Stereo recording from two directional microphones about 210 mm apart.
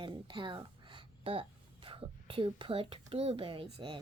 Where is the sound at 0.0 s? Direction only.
20° right (ahead or behind).